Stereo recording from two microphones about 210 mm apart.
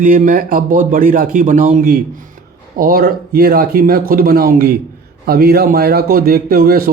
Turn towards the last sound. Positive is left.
turn(degrees=-45)  # may be behind; listen again after turning